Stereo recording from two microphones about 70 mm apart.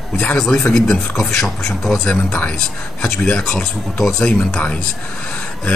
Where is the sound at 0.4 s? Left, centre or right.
Centre.